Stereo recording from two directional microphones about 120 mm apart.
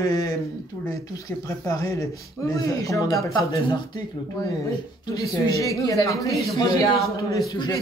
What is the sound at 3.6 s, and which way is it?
Speech, 40° left (ahead or behind).